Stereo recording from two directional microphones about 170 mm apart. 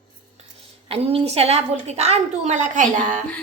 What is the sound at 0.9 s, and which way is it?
A woman's voice, 35° right (ahead or behind).